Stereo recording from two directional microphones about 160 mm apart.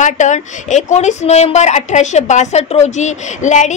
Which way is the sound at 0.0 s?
50° left (ahead or behind).